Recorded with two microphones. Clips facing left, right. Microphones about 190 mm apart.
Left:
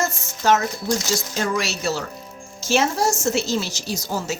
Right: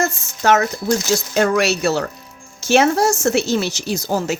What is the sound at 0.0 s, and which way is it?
Speech, 65° right (ahead or behind).